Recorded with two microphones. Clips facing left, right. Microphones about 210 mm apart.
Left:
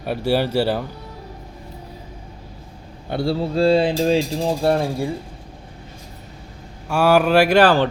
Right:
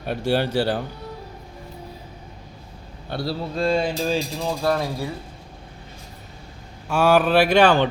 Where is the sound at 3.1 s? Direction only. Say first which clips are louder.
Left 6 dB; 25° left (ahead or behind).